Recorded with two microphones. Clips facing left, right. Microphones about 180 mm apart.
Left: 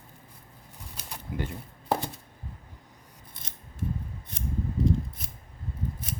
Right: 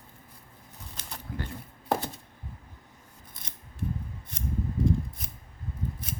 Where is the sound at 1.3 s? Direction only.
20° left (ahead or behind).